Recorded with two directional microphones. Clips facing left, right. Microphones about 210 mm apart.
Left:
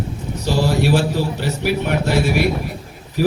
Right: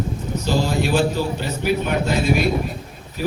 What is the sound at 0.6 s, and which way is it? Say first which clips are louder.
A man's voice: left 4 dB; 75° left (ahead or behind).